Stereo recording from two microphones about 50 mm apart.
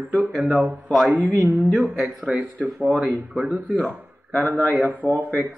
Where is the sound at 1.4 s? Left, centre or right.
Right.